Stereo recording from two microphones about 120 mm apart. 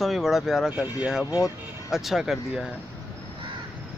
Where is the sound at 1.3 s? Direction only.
25° left (ahead or behind).